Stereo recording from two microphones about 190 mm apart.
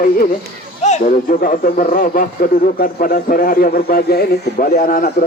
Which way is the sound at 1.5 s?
50° left (ahead or behind).